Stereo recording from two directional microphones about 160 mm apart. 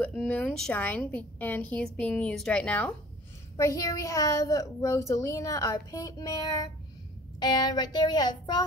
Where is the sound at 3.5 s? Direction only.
20° left (ahead or behind).